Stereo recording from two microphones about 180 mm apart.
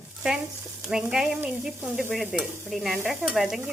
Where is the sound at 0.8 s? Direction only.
5° right (ahead or behind).